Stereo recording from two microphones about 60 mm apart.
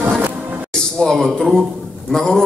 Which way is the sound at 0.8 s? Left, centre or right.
Centre.